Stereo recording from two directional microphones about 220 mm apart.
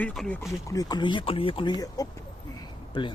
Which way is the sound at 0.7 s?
15° left (ahead or behind).